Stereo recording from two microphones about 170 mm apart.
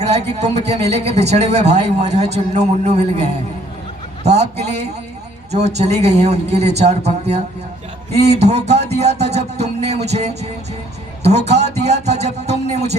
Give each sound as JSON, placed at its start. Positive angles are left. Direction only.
{"t": 0.0, "sound": "speech", "side_deg": -40}